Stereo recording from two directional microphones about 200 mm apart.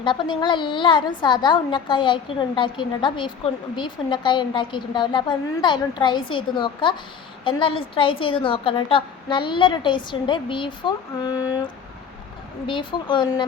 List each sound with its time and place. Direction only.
0.0 s a woman's voice: 25° left (ahead or behind)